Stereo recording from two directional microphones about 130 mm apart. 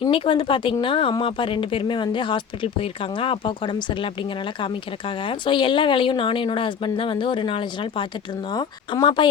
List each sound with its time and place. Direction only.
0.0 s speech: 40° left (ahead or behind)